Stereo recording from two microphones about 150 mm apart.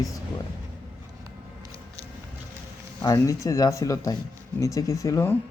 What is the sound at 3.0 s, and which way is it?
Speech, 20° left (ahead or behind).